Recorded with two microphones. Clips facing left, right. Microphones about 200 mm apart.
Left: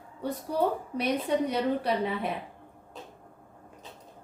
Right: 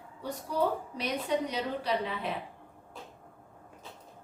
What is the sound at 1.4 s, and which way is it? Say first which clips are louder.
Speech: left 5 dB; 55° left (ahead or behind).